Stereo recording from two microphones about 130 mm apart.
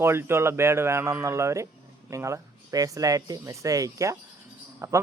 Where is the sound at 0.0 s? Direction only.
20° right (ahead or behind).